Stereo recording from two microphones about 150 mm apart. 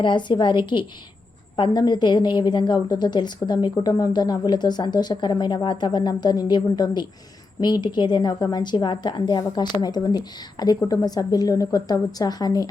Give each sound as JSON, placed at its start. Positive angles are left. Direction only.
{"t": 0.0, "sound": "a woman's voice", "side_deg": 30}